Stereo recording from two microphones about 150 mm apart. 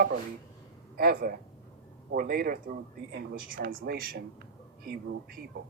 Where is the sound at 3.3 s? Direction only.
75° right (ahead or behind); by 4.2 s 90° right.